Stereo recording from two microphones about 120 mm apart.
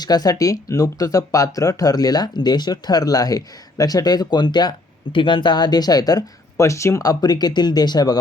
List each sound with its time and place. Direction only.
0.0 s speech: 35° left (ahead or behind)